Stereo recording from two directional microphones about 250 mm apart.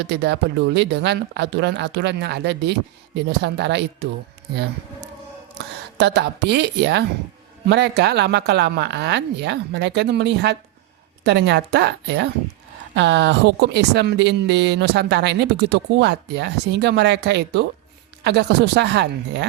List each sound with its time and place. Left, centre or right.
0.0 s speech: right
6.0 s speech: right